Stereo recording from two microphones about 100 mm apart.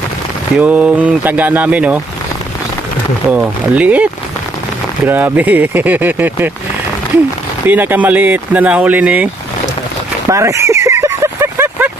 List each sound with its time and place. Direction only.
0.6 s speech: 15° right (ahead or behind)
3.2 s speech: 15° right (ahead or behind)
7.7 s speech: 20° right (ahead or behind)
10.2 s vehicle: 30° right (ahead or behind)